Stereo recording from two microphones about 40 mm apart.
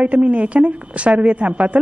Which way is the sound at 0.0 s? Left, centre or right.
Right.